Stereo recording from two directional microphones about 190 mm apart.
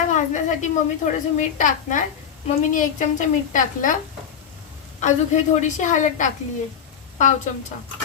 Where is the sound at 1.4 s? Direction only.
40° left (ahead or behind).